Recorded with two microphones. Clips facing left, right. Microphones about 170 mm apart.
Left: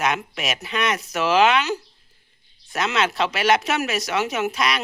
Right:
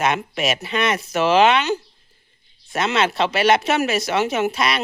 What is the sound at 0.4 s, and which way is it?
Speech, 30° right (ahead or behind).